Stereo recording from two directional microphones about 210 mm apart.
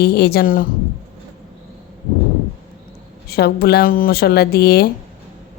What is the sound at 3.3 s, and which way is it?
A woman's voice, 50° left (ahead or behind).